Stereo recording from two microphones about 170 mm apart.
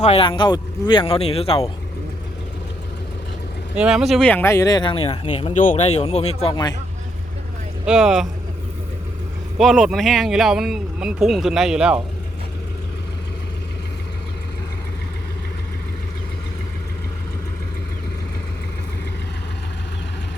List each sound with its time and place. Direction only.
0.0 s speech: 35° left (ahead or behind)
3.8 s speech: 5° right (ahead or behind)
4.3 s speech: 15° left (ahead or behind); by 5.5 s 30° left (ahead or behind)
5.5 s speech: 45° left (ahead or behind)
7.9 s speech: 5° right (ahead or behind)
9.6 s speech: centre (ahead or behind)